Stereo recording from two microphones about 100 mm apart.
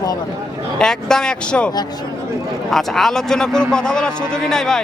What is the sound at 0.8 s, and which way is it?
Speech, 5° left (ahead or behind).